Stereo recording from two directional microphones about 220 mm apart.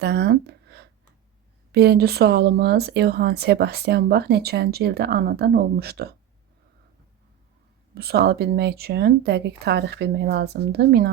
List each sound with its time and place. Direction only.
0.0 s speech: 50° right (ahead or behind)
7.9 s speech: 45° right (ahead or behind)